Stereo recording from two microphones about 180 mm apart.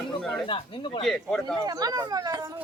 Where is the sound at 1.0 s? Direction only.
5° left (ahead or behind).